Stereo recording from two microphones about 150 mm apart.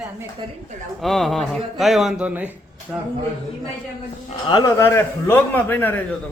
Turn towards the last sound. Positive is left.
turn(degrees=15)  # may be behind; listen again after turning